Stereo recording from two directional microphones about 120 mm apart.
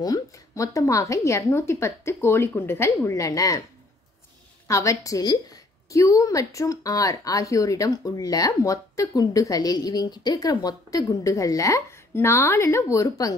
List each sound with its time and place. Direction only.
0.0 s a woman's voice: 30° left (ahead or behind)
4.6 s a woman's voice: 25° left (ahead or behind)